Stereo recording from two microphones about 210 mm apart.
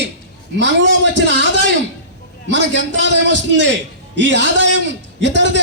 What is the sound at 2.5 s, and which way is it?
A man's voice, 60° right (ahead or behind).